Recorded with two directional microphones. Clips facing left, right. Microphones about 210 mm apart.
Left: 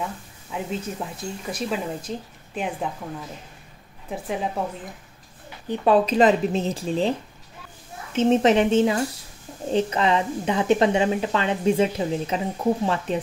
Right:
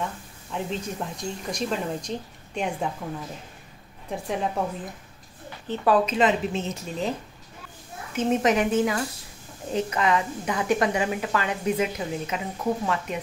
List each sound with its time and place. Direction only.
0.0 s speech: 5° left (ahead or behind)
4.1 s speech: centre (ahead or behind)
5.7 s a woman's voice: 25° left (ahead or behind)
6.0 s speech: 35° left (ahead or behind)
8.2 s a woman's voice: 30° left (ahead or behind)